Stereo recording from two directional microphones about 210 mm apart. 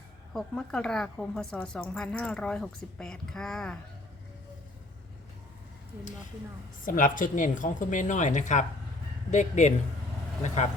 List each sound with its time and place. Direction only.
0.3 s speech: 5° left (ahead or behind)
6.8 s speech: 40° left (ahead or behind)